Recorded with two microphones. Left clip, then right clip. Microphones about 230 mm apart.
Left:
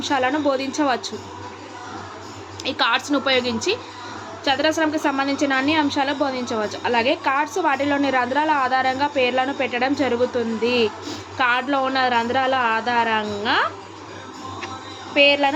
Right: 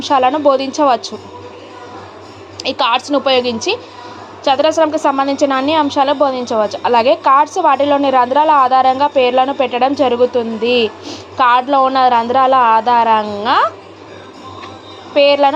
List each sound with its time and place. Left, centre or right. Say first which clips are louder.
0.0 s a woman's voice: right 9 dB; centre
2.6 s a woman's voice: right 6 dB; centre
15.1 s a woman's voice: right 6 dB; centre